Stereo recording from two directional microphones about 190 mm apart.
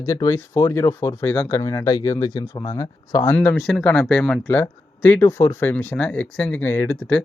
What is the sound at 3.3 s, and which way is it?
Speech, 10° left (ahead or behind).